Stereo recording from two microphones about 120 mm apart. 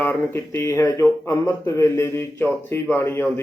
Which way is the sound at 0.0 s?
20° left (ahead or behind).